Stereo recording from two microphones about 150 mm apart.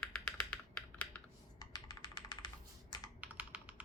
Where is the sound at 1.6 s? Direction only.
25° left (ahead or behind).